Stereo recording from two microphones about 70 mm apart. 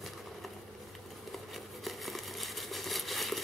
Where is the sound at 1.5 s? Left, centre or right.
Centre.